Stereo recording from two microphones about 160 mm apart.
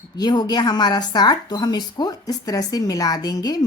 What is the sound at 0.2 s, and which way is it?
Speech, 25° left (ahead or behind).